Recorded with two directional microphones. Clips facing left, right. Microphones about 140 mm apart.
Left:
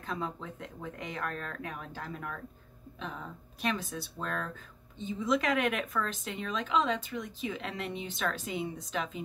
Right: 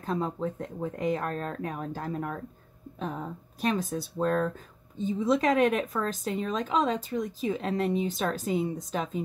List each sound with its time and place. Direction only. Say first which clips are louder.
0.0 s speech: right 7 dB; 40° right (ahead or behind)